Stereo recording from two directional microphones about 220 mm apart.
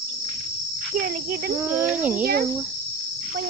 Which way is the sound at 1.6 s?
10° right (ahead or behind).